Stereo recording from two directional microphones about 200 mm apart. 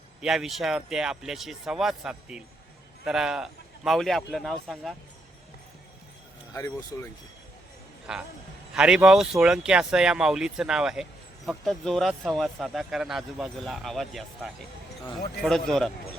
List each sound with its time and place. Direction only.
0.2 s speech: centre (ahead or behind)
6.5 s speech: 15° left (ahead or behind)
8.1 s speech: 5° right (ahead or behind)